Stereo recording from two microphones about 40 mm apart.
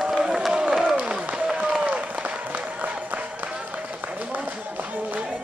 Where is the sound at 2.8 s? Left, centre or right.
Right.